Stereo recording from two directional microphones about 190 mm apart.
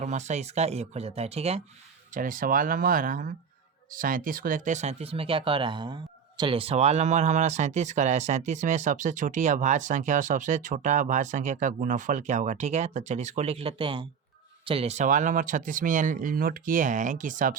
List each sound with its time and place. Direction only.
0.0 s speech: 40° right (ahead or behind)
2.1 s speech: 45° right (ahead or behind)